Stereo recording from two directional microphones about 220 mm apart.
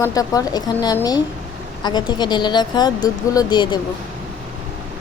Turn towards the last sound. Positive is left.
turn(degrees=20)  # may be behind; listen again after turning